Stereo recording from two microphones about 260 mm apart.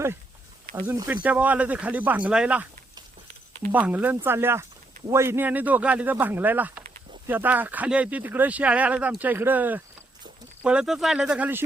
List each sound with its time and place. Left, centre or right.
0.9 s speech: centre
3.7 s speech: centre